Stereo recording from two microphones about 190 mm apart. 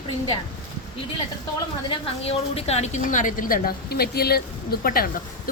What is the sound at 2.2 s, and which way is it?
A woman's voice, 35° left (ahead or behind).